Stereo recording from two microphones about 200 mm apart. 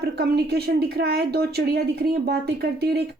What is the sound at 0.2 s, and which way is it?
Speech, 55° right (ahead or behind).